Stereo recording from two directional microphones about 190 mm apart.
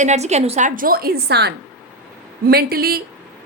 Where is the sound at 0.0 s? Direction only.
35° right (ahead or behind).